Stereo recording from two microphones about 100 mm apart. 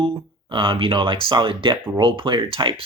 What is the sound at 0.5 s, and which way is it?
Speech, 60° right (ahead or behind).